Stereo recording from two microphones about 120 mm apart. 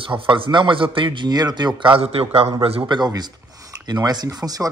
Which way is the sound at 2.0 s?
55° right (ahead or behind).